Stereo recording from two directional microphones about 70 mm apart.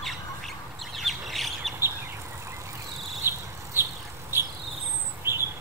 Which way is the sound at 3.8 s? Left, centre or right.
Right.